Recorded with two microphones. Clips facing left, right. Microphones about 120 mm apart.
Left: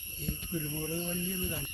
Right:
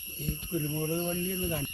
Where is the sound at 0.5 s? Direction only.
45° right (ahead or behind); by 1.6 s 65° right (ahead or behind).